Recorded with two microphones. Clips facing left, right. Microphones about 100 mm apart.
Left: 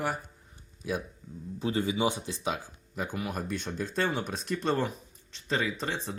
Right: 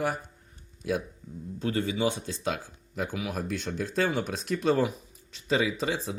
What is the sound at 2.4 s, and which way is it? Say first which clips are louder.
Speech: right 2 dB; 5° left (ahead or behind).